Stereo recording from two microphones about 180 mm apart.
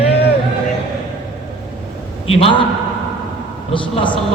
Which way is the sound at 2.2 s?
30° left (ahead or behind).